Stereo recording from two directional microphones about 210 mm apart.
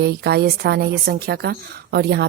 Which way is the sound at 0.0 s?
50° right (ahead or behind).